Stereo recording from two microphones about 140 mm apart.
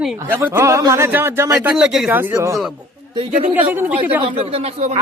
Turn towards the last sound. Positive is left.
turn(degrees=-50)  # may be behind; listen again after turning